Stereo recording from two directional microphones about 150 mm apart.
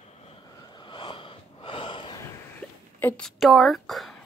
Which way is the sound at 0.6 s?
30° left (ahead or behind).